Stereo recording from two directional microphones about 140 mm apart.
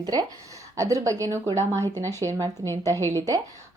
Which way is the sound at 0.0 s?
25° right (ahead or behind).